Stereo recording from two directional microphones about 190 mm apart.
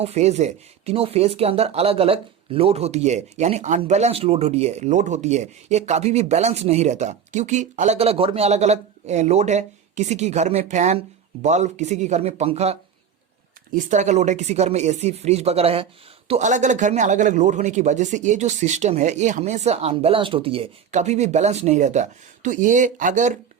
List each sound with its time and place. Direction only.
0.0 s speech: 35° right (ahead or behind)
13.7 s speech: 40° right (ahead or behind)